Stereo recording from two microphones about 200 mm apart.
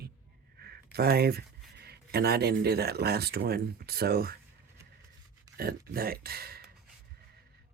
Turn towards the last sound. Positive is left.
turn(degrees=-50)  # may be behind; listen again after turning